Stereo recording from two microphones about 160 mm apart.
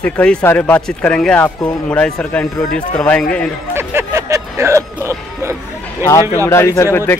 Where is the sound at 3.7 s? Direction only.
15° right (ahead or behind).